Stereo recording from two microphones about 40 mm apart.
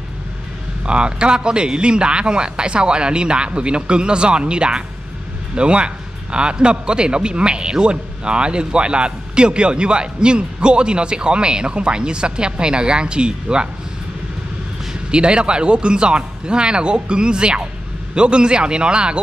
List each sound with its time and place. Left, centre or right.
0.8 s a man's voice: right
15.0 s a man's voice: right